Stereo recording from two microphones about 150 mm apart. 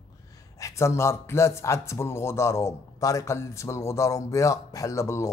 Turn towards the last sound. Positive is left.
turn(degrees=20)  # may be behind; listen again after turning